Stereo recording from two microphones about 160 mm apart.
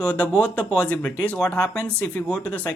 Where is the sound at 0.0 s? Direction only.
5° left (ahead or behind).